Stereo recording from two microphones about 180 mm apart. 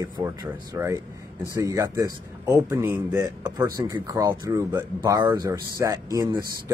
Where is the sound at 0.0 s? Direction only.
20° right (ahead or behind).